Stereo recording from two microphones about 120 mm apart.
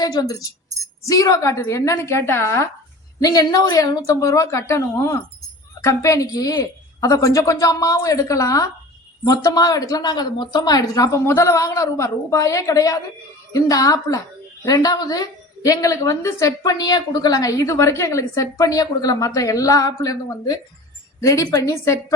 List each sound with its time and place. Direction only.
0.0 s a woman's voice: 35° left (ahead or behind)